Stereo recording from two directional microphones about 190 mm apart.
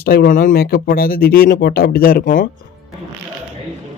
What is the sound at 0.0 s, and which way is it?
Speech, 50° left (ahead or behind).